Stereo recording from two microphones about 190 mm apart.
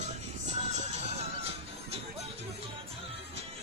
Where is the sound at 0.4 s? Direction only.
35° right (ahead or behind).